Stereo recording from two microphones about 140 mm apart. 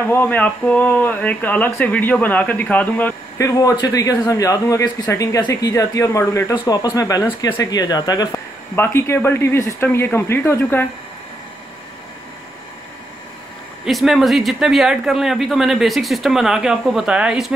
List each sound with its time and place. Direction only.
0.1 s speech: 10° left (ahead or behind)
3.3 s a man's voice: 25° left (ahead or behind)
8.7 s speech: 15° left (ahead or behind)
13.8 s speech: centre (ahead or behind)